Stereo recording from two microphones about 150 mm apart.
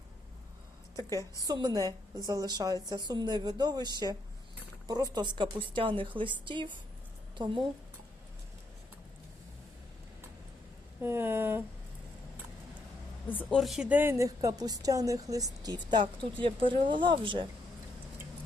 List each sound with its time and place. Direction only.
0.9 s a woman's voice: 25° right (ahead or behind)
11.0 s speech: 15° right (ahead or behind)
13.2 s a woman's voice: 10° left (ahead or behind); by 17.5 s 35° right (ahead or behind)